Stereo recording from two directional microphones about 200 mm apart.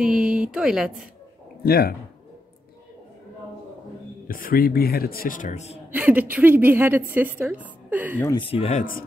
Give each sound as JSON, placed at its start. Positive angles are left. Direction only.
{"t": 0.0, "sound": "speech", "side_deg": -5}
{"t": 1.6, "sound": "a man's voice", "side_deg": 50}
{"t": 4.3, "sound": "a man's voice", "side_deg": 45}
{"t": 5.9, "sound": "a woman's voice", "side_deg": -10}
{"t": 8.2, "sound": "speech", "side_deg": 20}